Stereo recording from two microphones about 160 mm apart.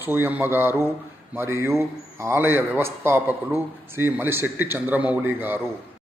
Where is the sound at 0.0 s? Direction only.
15° right (ahead or behind).